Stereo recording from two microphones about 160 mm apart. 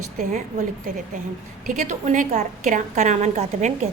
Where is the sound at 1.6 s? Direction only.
50° right (ahead or behind).